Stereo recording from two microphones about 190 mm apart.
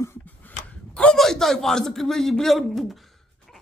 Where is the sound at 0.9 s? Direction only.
5° left (ahead or behind).